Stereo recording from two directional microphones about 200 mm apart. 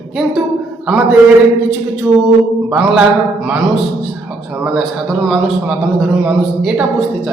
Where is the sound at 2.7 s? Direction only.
5° right (ahead or behind).